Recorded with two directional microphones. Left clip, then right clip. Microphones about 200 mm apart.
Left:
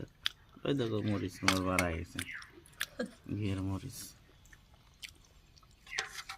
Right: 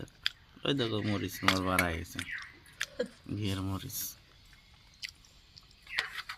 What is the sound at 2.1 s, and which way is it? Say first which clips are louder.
Chewing: right 3 dB; 50° left (ahead or behind).